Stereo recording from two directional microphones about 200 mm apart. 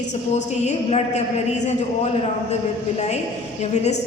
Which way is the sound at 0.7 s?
35° left (ahead or behind).